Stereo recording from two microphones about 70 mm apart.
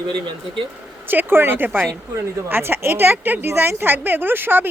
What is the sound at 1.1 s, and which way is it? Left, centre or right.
A woman's voice, right.